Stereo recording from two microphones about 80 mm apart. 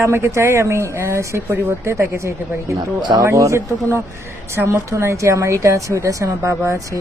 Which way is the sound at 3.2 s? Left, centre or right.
Right.